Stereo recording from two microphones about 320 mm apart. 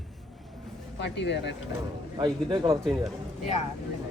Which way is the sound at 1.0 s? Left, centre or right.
Left.